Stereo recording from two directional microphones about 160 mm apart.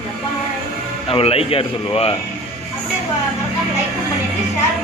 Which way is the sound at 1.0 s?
35° left (ahead or behind).